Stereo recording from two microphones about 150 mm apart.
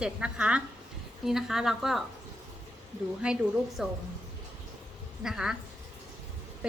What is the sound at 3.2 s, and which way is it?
Speech, 5° right (ahead or behind).